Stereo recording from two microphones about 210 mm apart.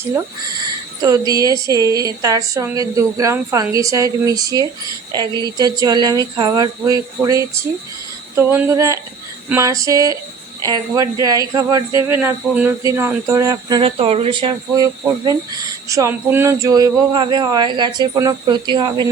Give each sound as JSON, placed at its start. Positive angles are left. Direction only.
{"t": 1.3, "sound": "a woman's voice", "side_deg": -15}
{"t": 15.9, "sound": "speech", "side_deg": -15}